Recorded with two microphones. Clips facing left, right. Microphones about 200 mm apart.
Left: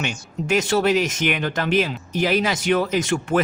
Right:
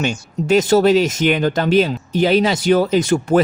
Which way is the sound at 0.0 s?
35° right (ahead or behind).